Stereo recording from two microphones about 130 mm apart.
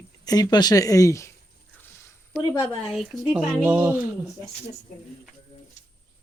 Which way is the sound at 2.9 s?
5° right (ahead or behind).